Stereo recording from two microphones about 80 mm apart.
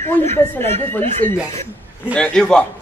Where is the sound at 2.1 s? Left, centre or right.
Centre.